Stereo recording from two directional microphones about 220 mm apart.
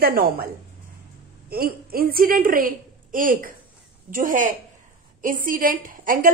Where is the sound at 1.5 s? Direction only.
45° right (ahead or behind).